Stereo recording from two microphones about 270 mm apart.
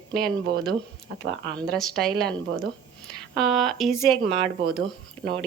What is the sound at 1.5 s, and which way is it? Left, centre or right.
A woman's voice, centre.